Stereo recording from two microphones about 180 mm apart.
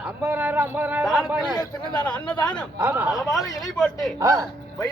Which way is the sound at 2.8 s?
10° right (ahead or behind).